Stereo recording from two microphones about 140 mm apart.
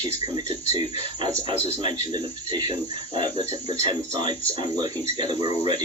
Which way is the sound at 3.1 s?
40° right (ahead or behind).